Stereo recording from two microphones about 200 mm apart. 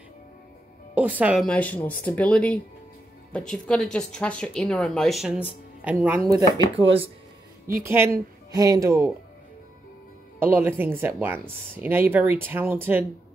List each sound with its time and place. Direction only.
0.9 s speech: 5° right (ahead or behind)
6.8 s speech: 25° right (ahead or behind)
7.8 s speech: 10° right (ahead or behind)
10.4 s speech: 10° right (ahead or behind)